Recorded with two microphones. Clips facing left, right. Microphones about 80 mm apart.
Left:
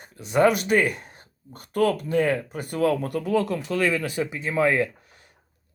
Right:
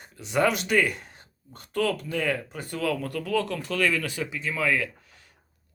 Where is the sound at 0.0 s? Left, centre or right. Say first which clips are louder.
Left 4 dB; left.